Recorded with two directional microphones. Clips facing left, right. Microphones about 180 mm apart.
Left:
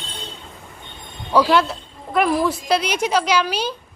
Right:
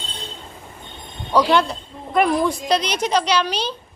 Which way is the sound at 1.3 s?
5° left (ahead or behind).